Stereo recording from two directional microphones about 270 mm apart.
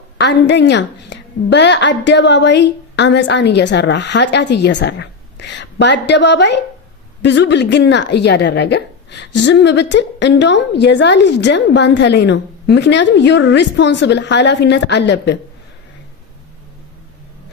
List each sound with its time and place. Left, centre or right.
0.2 s a woman's voice: left